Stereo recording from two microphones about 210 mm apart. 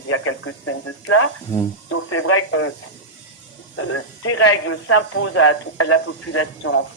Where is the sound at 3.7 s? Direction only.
90° left.